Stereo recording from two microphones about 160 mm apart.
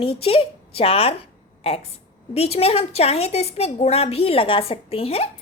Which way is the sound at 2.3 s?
40° left (ahead or behind).